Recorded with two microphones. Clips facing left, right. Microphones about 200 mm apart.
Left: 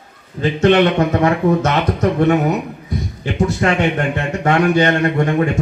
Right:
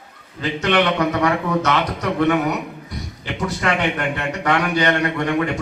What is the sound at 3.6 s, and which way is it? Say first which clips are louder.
Speech: left 2 dB; 40° left (ahead or behind).